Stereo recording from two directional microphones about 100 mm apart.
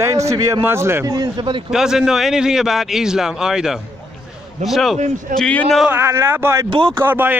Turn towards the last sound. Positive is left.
turn(degrees=-20)  # may be behind; listen again after turning